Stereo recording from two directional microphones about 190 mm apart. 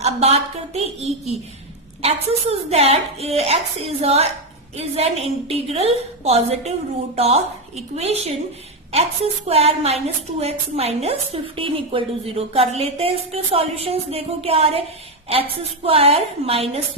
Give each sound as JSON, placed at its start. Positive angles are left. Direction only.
{"t": 0.0, "sound": "a woman's voice", "side_deg": -35}